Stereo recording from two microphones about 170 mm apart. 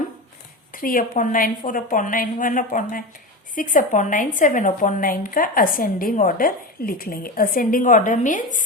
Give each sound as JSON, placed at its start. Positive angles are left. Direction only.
{"t": 0.7, "sound": "a woman's voice", "side_deg": 55}